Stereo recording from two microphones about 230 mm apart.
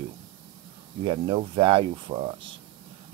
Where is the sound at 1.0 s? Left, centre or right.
Right.